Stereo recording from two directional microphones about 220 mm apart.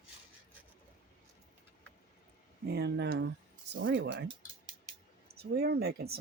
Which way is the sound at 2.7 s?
50° right (ahead or behind).